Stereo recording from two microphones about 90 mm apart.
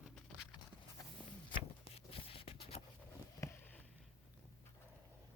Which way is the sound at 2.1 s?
90° left.